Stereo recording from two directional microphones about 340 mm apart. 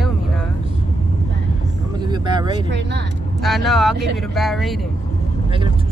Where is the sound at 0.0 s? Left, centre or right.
Centre.